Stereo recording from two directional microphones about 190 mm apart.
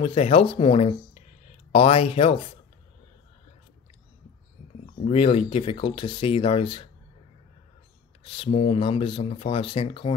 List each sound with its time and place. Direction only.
0.0 s speech: 30° left (ahead or behind)
5.0 s speech: 30° left (ahead or behind)
8.2 s speech: 30° left (ahead or behind)